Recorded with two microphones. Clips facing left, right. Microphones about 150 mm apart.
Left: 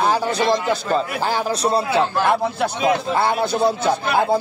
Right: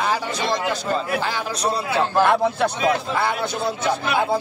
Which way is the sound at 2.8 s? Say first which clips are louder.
Left 6 dB; 30° left (ahead or behind).